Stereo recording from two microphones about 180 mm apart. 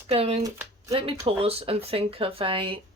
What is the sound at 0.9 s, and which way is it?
Speech, 30° right (ahead or behind).